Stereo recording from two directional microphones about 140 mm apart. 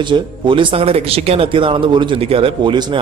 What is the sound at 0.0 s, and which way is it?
Speech, 35° right (ahead or behind).